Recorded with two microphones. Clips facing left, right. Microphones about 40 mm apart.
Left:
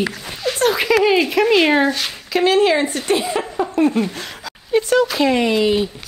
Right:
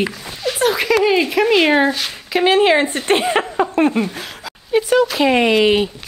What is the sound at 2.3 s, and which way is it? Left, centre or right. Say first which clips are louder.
Speech: right 2 dB; right.